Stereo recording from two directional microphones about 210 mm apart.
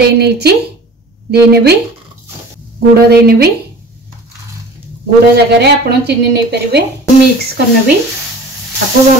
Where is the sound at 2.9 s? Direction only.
50° right (ahead or behind).